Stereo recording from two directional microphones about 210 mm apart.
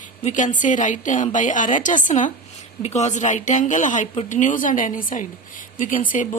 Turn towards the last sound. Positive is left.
turn(degrees=40)  # may be behind; listen again after turning